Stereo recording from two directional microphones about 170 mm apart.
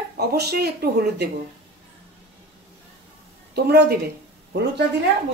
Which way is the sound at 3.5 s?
70° right (ahead or behind).